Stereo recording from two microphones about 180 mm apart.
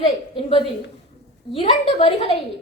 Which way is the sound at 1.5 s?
35° left (ahead or behind).